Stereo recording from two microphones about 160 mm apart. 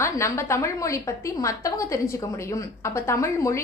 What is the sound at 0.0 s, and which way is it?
A woman's voice, 15° left (ahead or behind).